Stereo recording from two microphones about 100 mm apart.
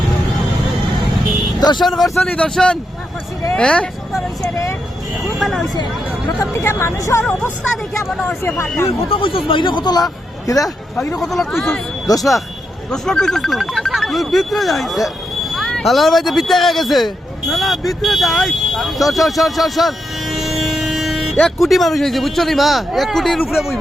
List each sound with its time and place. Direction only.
1.5 s vehicle: 45° left (ahead or behind)
1.8 s speech: centre (ahead or behind)
2.2 s speech: 15° left (ahead or behind)
5.4 s speech: centre (ahead or behind)
6.2 s speech: 30° left (ahead or behind)
8.4 s speech: 25° left (ahead or behind)
8.9 s speech: 65° left (ahead or behind); by 10.0 s 45° left (ahead or behind)
10.4 s speech: 35° left (ahead or behind)
11.2 s speech: centre (ahead or behind)
12.1 s speech: 40° left (ahead or behind)
12.9 s speech: 5° left (ahead or behind)